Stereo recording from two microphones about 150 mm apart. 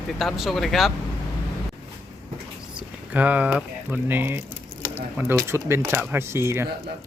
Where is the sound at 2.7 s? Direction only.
10° right (ahead or behind).